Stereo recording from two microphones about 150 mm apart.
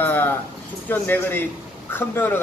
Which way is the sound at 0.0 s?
10° left (ahead or behind).